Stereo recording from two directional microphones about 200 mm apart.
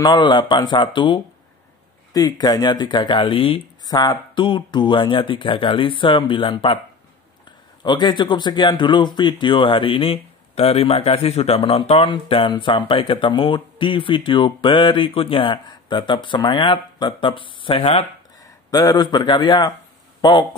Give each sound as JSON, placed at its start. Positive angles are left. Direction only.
{"t": 0.0, "sound": "speech", "side_deg": 20}
{"t": 7.8, "sound": "speech", "side_deg": 20}